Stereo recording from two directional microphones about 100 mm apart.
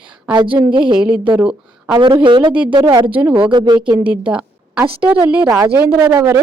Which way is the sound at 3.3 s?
55° right (ahead or behind).